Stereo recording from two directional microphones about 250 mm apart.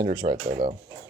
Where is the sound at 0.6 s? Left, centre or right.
Right.